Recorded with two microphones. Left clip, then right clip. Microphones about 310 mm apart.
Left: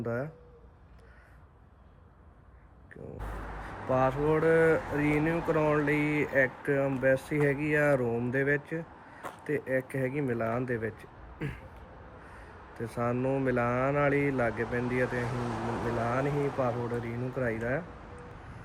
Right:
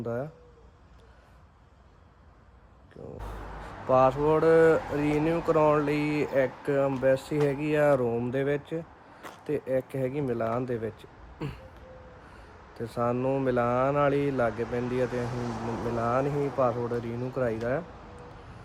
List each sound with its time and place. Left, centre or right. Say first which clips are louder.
0.0 s speech: right 1 dB; centre
3.8 s speech: right 5 dB; centre
13.0 s speech: right 3 dB; centre
15.5 s speech: even; left
16.0 s speech: right 5 dB; centre